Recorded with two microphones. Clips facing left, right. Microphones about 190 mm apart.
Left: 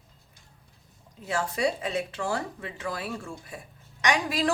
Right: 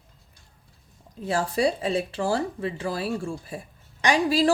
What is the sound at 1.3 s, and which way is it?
Speech, 35° right (ahead or behind).